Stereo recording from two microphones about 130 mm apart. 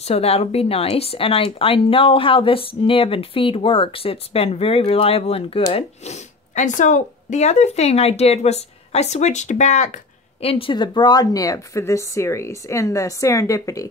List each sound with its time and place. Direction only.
0.0 s a woman's voice: 50° left (ahead or behind)
10.4 s speech: 45° left (ahead or behind); by 13.8 s 25° left (ahead or behind)